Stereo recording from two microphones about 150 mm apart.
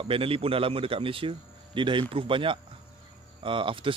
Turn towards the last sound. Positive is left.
turn(degrees=-35)  # may be behind; listen again after turning